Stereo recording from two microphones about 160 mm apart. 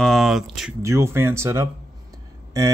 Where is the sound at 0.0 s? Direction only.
Centre (ahead or behind).